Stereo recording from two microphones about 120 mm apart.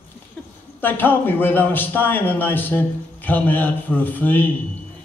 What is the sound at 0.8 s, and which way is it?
A man's voice, 15° left (ahead or behind).